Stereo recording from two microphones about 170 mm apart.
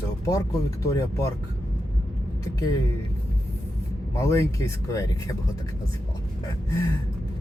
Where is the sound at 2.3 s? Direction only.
20° left (ahead or behind).